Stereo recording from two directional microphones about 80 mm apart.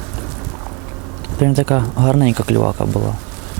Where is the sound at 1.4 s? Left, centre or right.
Centre.